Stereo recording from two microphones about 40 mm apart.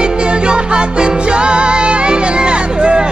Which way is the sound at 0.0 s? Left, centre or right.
Right.